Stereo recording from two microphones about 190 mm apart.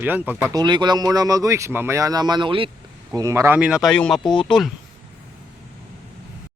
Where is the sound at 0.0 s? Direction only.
10° right (ahead or behind); by 2.6 s 25° right (ahead or behind).